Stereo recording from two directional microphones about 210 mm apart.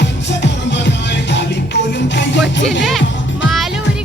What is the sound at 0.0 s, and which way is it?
Music, 55° left (ahead or behind).